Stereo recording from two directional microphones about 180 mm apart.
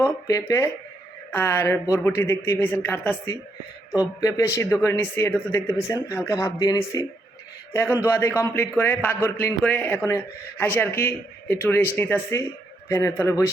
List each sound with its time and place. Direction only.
0.0 s a man's voice: 15° left (ahead or behind)